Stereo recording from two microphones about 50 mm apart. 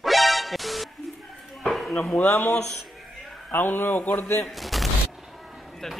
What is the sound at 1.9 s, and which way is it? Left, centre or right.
Speech, left.